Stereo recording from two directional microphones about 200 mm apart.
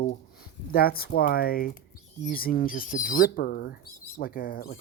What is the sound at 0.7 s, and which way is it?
Speech, 50° left (ahead or behind).